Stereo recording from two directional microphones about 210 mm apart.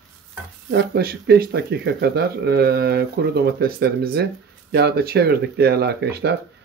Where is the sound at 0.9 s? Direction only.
50° right (ahead or behind).